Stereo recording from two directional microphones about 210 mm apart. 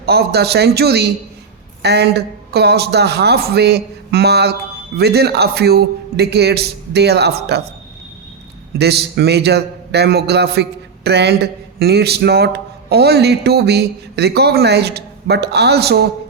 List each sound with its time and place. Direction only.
0.0 s a man's voice: 50° right (ahead or behind)
8.8 s a man's voice: 50° right (ahead or behind)